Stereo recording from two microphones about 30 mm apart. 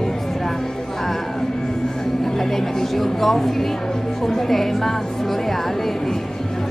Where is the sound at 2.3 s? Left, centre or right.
Centre.